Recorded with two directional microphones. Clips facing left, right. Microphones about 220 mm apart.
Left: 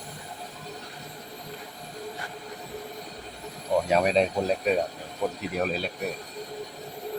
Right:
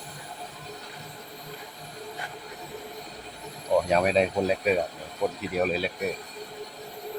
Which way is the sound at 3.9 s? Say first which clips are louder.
Even; centre (ahead or behind).